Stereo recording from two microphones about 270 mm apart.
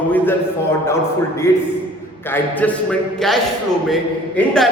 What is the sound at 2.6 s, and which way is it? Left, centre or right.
Speech, centre.